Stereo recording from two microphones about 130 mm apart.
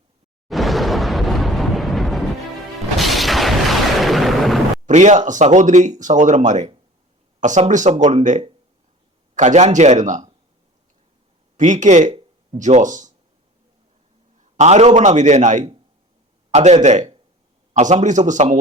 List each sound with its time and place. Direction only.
0.4 s a sound: centre (ahead or behind)
3.0 s artillery fire: centre (ahead or behind)
4.9 s a man's voice: 65° right (ahead or behind)
11.5 s speech: 70° right (ahead or behind)
14.3 s a man's voice: 65° right (ahead or behind)